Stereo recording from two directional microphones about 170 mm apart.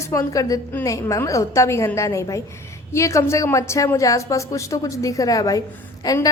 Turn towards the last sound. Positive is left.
turn(degrees=20)  # may be behind; listen again after turning